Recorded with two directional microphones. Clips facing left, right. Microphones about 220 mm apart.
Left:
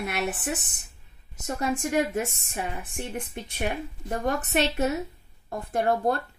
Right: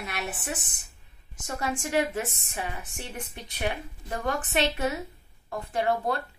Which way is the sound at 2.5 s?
50° left (ahead or behind).